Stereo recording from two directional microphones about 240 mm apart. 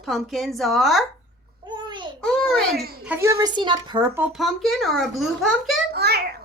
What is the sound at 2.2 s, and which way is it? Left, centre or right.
Speech, centre.